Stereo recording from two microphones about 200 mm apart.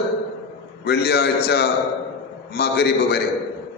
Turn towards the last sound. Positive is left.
turn(degrees=55)  # may be behind; listen again after turning